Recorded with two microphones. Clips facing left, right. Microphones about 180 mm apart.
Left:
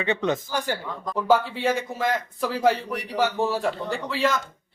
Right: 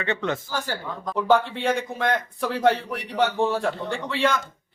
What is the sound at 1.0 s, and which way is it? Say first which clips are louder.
Speech: right 1 dB; centre (ahead or behind).